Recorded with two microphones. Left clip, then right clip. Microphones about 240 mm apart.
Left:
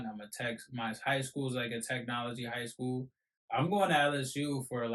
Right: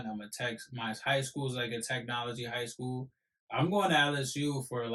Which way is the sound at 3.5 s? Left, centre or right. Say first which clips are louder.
Even; centre.